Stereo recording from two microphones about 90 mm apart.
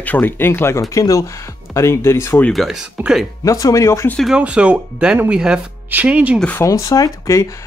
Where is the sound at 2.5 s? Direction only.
5° right (ahead or behind).